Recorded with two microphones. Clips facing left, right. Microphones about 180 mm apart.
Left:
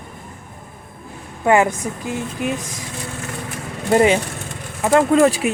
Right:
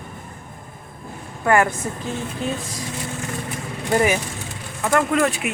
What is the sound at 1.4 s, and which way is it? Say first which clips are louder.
Speech: left 3 dB; 20° left (ahead or behind).